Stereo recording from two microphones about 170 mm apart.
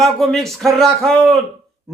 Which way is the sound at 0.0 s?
Centre (ahead or behind).